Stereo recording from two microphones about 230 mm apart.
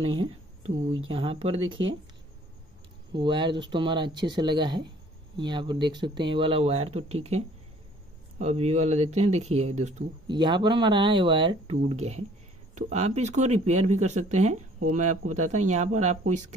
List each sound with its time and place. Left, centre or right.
1.0 s speech: right
3.1 s speech: centre
8.4 s speech: right